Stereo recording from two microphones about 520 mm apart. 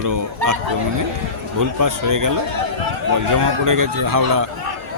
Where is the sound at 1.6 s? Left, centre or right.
Right.